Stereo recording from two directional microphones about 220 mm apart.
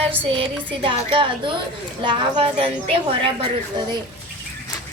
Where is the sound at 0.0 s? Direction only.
25° right (ahead or behind).